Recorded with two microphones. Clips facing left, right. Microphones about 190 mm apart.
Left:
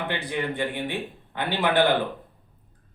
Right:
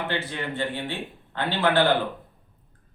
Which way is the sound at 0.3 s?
15° left (ahead or behind).